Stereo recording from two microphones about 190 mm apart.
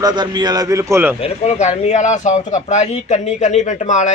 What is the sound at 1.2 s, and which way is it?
A man's voice, 35° left (ahead or behind).